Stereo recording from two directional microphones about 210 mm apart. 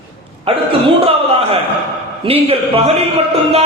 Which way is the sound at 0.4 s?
25° right (ahead or behind).